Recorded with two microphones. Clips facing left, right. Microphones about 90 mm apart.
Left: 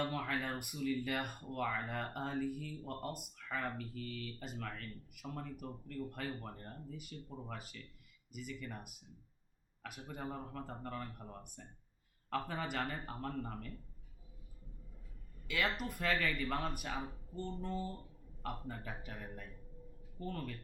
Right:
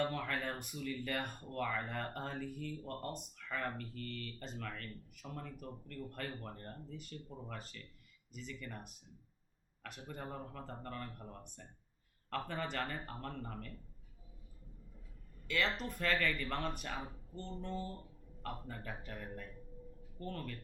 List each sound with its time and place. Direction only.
0.0 s speech: 5° left (ahead or behind)
15.4 s speech: 5° left (ahead or behind)